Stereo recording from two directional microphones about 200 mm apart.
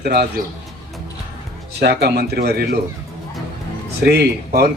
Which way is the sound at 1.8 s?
55° right (ahead or behind).